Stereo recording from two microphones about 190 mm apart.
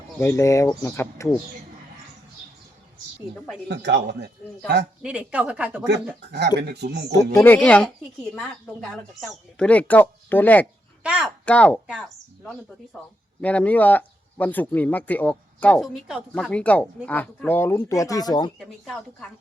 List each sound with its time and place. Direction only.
0.2 s speech: 15° left (ahead or behind)
3.7 s speech: 65° right (ahead or behind)
5.0 s speech: 5° right (ahead or behind)
5.8 s speech: 60° right (ahead or behind)
7.3 s speech: 10° left (ahead or behind)
11.0 s speech: 5° right (ahead or behind)
11.4 s speech: 5° left (ahead or behind)
13.4 s speech: 5° left (ahead or behind)
18.6 s speech: centre (ahead or behind)